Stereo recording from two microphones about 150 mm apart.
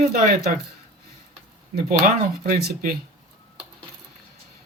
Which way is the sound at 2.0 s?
70° right (ahead or behind).